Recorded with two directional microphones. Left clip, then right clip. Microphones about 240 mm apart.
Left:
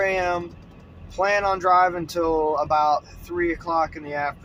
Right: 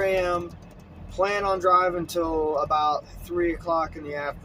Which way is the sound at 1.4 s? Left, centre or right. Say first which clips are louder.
Left 1 dB; centre.